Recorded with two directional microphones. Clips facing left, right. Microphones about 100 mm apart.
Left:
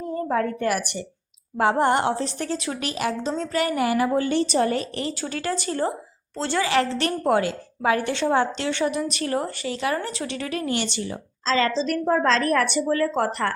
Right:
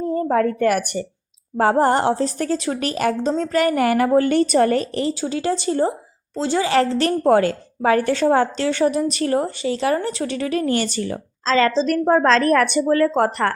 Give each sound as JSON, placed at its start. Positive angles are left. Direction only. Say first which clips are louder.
{"t": 0.3, "sound": "a woman's voice", "louder": "right 5 dB", "side_deg": -50}
{"t": 1.5, "sound": "a woman's voice", "louder": "right 4 dB", "side_deg": -40}
{"t": 5.2, "sound": "a woman's voice", "louder": "right 6 dB", "side_deg": -25}
{"t": 6.7, "sound": "a woman's voice", "louder": "right 6 dB", "side_deg": -40}